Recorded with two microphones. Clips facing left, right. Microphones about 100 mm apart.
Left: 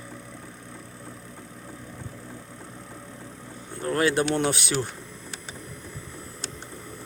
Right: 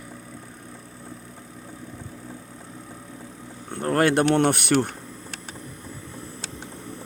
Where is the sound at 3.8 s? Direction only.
55° right (ahead or behind).